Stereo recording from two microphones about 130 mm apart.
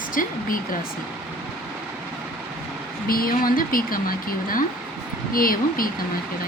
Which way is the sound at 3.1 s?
90° left.